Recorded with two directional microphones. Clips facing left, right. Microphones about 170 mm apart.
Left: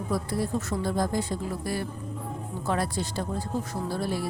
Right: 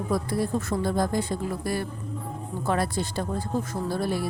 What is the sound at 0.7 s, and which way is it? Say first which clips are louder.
A woman's voice: right 2 dB; 55° right (ahead or behind).